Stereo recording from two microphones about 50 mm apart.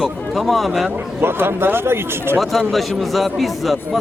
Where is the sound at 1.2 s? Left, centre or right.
Right.